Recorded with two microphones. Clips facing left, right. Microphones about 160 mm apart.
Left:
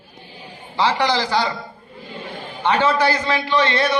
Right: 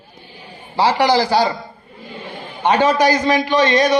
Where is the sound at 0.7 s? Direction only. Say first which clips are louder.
Right 4 dB; 10° right (ahead or behind).